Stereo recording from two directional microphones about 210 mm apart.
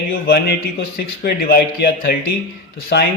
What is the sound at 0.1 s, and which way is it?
A man's voice, 50° left (ahead or behind).